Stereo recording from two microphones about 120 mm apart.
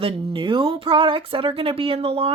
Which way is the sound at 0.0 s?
45° right (ahead or behind).